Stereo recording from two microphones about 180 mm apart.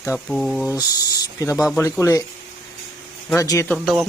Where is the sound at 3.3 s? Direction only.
15° left (ahead or behind).